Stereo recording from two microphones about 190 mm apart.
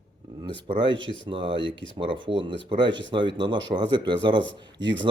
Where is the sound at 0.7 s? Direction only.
25° right (ahead or behind).